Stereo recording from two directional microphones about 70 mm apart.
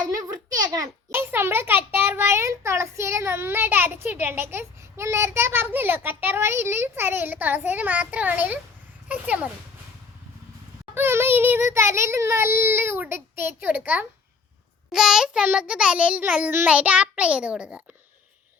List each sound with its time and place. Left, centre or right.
1.1 s a child's voice: right
10.9 s a child's voice: right
14.9 s child singing: centre
16.6 s a child's voice: centre